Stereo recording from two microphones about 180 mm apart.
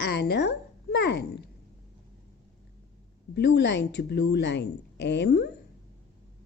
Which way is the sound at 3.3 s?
75° left (ahead or behind).